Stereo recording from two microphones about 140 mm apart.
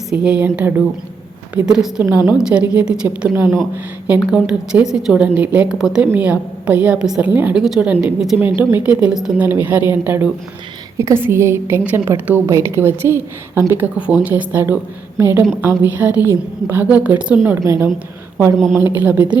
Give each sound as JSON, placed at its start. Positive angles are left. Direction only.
{"t": 0.1, "sound": "a woman's voice", "side_deg": -5}
{"t": 8.4, "sound": "a woman's voice", "side_deg": -15}